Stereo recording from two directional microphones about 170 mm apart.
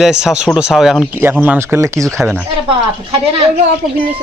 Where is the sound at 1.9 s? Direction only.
Centre (ahead or behind).